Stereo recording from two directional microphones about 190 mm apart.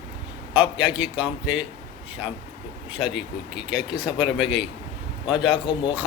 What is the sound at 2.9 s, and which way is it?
A man's voice, 5° right (ahead or behind).